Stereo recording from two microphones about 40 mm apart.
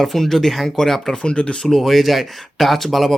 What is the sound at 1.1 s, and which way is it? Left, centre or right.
Speech, left.